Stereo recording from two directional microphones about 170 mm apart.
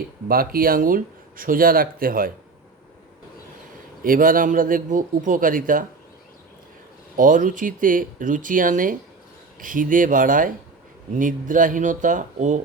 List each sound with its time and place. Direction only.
0.3 s speech: 60° right (ahead or behind)
4.0 s a man's voice: 55° right (ahead or behind)
7.2 s a man's voice: 50° right (ahead or behind)